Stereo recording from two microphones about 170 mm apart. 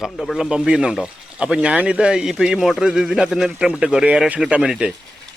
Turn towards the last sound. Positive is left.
turn(degrees=-5)  # may be behind; listen again after turning